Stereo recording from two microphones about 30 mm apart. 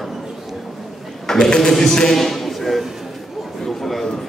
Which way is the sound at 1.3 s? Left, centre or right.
Left.